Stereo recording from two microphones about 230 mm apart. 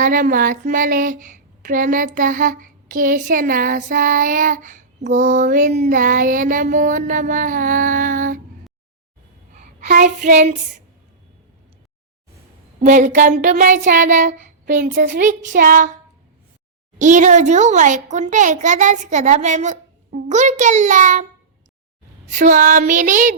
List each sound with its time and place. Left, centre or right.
0.0 s speech: right
9.6 s child singing: right
12.8 s speech: right
17.0 s speech: right
22.3 s speech: right